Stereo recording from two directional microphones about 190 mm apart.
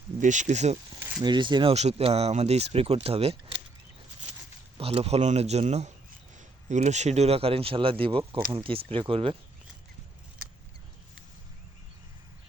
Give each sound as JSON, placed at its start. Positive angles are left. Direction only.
{"t": 0.2, "sound": "speech", "side_deg": -40}
{"t": 1.2, "sound": "speech", "side_deg": -25}
{"t": 4.8, "sound": "speech", "side_deg": -30}